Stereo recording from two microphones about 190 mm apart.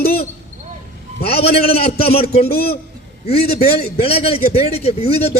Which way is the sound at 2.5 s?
55° left (ahead or behind).